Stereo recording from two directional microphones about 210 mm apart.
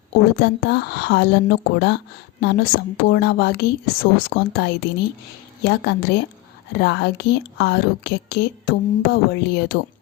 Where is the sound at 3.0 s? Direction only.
50° left (ahead or behind).